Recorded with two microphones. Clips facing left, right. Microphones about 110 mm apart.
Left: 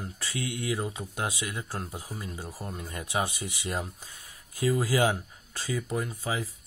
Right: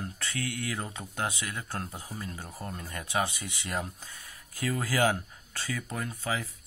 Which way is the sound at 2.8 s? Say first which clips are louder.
Even; 20° left (ahead or behind).